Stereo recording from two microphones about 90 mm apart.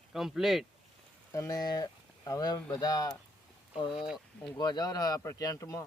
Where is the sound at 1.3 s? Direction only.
40° left (ahead or behind).